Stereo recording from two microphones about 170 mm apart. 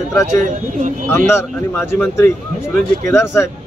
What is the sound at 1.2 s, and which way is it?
Speech, 15° left (ahead or behind).